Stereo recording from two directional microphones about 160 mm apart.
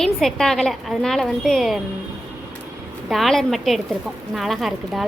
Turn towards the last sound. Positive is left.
turn(degrees=0)  # may be behind; listen again after turning